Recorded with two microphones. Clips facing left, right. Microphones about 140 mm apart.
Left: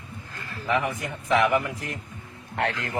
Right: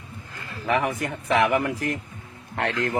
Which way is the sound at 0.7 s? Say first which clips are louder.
Right 2 dB; 65° right (ahead or behind).